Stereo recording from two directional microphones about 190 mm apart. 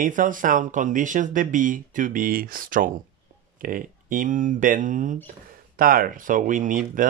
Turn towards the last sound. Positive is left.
turn(degrees=-45)  # may be behind; listen again after turning